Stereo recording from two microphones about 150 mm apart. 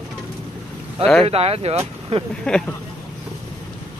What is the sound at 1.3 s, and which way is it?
Speech, 40° right (ahead or behind).